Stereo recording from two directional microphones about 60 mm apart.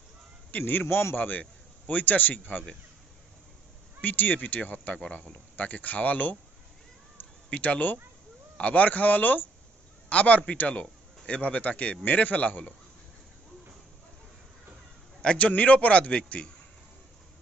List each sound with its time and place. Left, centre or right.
0.5 s a man's voice: left
0.8 s a man's voice: left
4.0 s a man's voice: left
7.4 s a man's voice: left
15.2 s a man's voice: left